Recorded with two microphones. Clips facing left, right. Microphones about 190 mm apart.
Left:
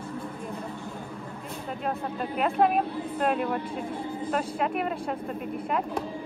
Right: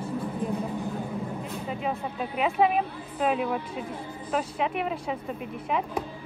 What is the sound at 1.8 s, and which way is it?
Speech, centre (ahead or behind).